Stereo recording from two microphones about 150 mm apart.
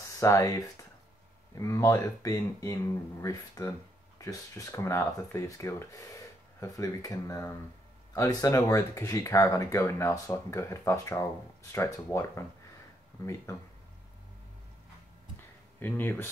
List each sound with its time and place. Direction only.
0.2 s speech: 20° left (ahead or behind)
15.8 s speech: 15° left (ahead or behind)